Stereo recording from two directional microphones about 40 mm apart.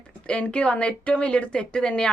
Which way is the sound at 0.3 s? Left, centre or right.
Left.